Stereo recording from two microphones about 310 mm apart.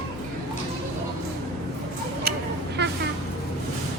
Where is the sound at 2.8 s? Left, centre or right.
Right.